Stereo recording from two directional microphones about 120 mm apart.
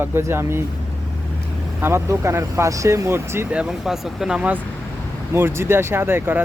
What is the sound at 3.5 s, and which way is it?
Speech, 5° right (ahead or behind).